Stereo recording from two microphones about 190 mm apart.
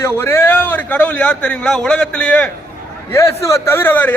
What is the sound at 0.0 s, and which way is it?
A man's voice, 15° left (ahead or behind).